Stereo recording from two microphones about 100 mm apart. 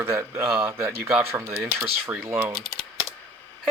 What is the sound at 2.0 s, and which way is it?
Speech, 15° right (ahead or behind).